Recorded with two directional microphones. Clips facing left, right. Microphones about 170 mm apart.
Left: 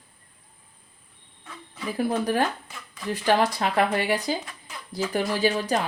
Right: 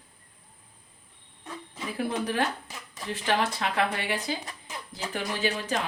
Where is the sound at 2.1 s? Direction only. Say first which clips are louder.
Left 4 dB; 40° left (ahead or behind).